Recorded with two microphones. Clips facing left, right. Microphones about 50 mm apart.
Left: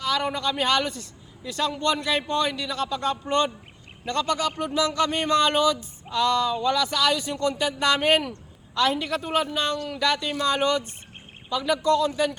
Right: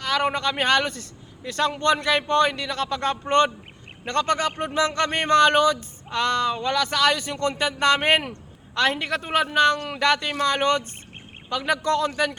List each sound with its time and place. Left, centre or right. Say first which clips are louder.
0.0 s speech: right 2 dB; right